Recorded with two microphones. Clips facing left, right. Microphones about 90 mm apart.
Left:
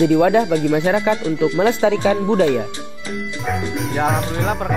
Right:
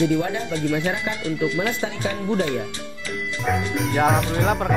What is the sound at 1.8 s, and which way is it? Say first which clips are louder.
Speech: left 10 dB; 85° left.